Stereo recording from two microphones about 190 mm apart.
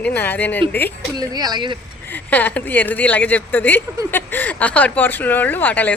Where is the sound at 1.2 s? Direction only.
20° right (ahead or behind).